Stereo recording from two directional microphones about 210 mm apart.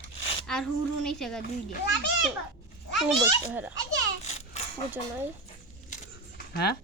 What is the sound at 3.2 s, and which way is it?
Speech, 10° right (ahead or behind).